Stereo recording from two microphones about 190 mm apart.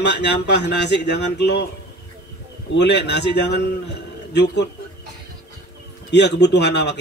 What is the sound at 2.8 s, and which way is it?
Speech, 65° left (ahead or behind).